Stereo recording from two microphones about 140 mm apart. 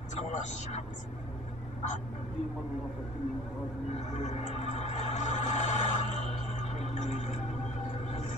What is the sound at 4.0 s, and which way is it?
Music, 55° left (ahead or behind).